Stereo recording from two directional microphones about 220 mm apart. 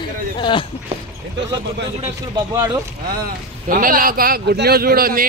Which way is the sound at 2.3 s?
15° right (ahead or behind).